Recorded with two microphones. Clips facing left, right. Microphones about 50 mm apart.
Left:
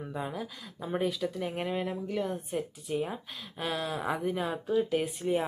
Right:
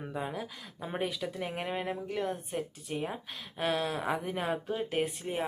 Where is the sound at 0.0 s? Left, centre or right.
Centre.